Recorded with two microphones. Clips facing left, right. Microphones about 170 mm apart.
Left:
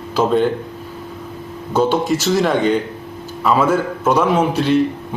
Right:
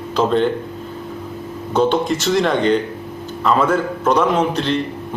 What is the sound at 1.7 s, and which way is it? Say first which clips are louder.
A man's voice: even; 5° left (ahead or behind).